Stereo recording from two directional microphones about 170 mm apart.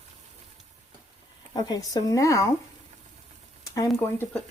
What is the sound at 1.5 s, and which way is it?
Speech, 25° left (ahead or behind).